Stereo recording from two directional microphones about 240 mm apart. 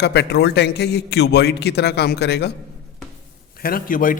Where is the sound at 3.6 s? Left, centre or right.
Left.